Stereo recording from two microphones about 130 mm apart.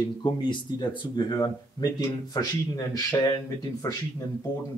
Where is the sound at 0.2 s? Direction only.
35° left (ahead or behind).